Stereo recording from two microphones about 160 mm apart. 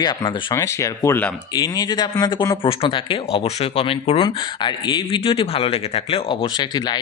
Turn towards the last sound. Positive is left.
turn(degrees=25)  # may be behind; listen again after turning